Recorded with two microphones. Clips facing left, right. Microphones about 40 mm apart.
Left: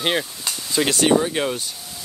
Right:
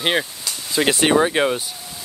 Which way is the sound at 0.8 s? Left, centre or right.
Right.